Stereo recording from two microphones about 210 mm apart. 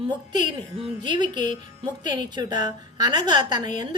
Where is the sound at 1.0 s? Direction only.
20° right (ahead or behind).